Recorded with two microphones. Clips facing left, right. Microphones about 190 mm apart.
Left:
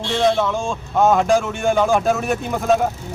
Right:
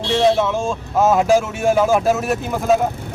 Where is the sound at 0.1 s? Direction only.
5° right (ahead or behind).